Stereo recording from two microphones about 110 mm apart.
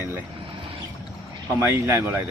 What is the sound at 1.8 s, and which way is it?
Speech, 20° right (ahead or behind).